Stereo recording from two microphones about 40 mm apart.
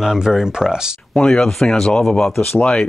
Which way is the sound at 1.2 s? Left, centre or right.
Centre.